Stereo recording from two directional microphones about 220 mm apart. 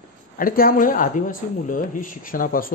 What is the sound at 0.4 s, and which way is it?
Speech, 40° left (ahead or behind).